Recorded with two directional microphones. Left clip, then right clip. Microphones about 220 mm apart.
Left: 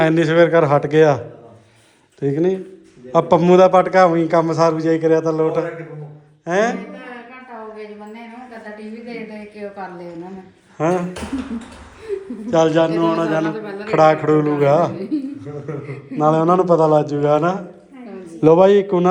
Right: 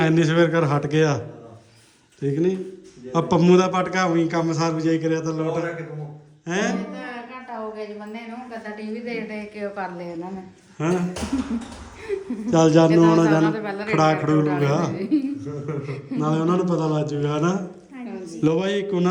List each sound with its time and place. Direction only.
0.0 s a man's voice: 15° right (ahead or behind)
2.2 s a man's voice: 10° right (ahead or behind)
6.4 s music: 10° right (ahead or behind)
9.0 s a man's voice: centre (ahead or behind)
12.5 s a man's voice: 20° right (ahead or behind)
13.5 s a man's voice: 5° right (ahead or behind)
13.9 s a man's voice: 15° right (ahead or behind)